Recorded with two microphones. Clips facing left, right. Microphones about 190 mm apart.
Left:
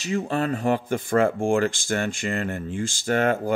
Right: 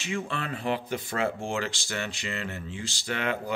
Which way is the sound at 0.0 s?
40° left (ahead or behind).